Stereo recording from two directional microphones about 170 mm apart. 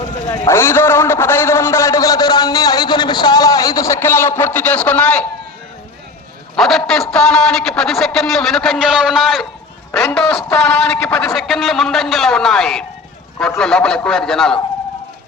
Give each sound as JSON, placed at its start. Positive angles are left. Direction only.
{"t": 0.3, "sound": "a man's voice", "side_deg": 15}
{"t": 6.6, "sound": "a man's voice", "side_deg": 0}
{"t": 9.9, "sound": "a man's voice", "side_deg": 15}